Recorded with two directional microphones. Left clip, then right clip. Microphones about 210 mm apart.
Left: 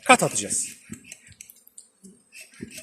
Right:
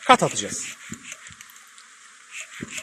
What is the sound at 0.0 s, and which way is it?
Speech, 15° right (ahead or behind).